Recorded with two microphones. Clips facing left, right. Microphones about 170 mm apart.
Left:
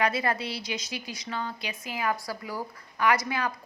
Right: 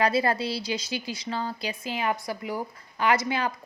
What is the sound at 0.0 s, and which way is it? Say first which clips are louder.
A woman's voice: right 3 dB; 30° right (ahead or behind).